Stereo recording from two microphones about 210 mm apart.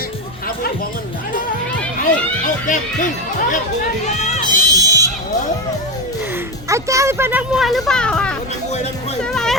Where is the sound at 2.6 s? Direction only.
35° left (ahead or behind).